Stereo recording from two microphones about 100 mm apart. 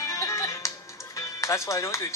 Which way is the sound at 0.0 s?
30° left (ahead or behind).